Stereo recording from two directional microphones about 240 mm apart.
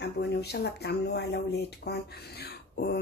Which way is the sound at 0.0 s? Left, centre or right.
Left.